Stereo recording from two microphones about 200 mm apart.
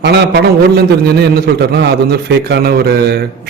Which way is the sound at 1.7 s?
55° right (ahead or behind).